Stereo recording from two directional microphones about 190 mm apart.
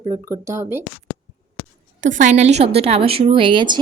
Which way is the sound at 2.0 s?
40° right (ahead or behind).